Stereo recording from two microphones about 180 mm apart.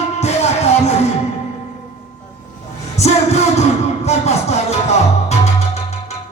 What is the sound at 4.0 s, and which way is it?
Music, 35° left (ahead or behind).